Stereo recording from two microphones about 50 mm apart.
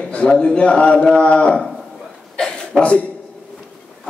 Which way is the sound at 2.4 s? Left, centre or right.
Centre.